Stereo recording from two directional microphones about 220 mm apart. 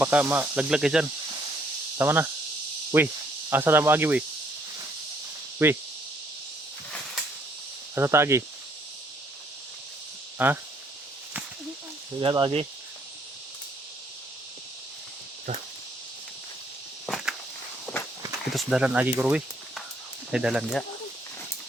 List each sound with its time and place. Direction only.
0.0 s speech: 5° right (ahead or behind)
5.6 s speech: 10° right (ahead or behind)
7.9 s speech: 10° right (ahead or behind)
10.3 s speech: 10° right (ahead or behind)
12.2 s speech: 25° right (ahead or behind)
17.1 s walk: centre (ahead or behind)
18.5 s speech: 5° right (ahead or behind)